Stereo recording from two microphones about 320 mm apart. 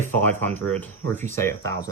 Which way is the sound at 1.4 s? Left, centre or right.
Centre.